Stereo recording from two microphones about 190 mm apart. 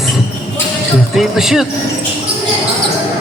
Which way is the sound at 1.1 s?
Centre (ahead or behind).